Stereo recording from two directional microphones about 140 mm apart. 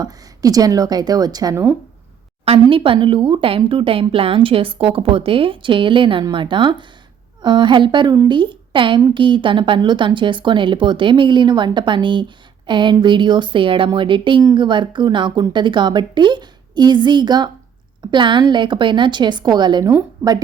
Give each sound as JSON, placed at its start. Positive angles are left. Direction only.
{"t": 0.0, "sound": "speech", "side_deg": -25}
{"t": 2.4, "sound": "a woman's voice", "side_deg": -40}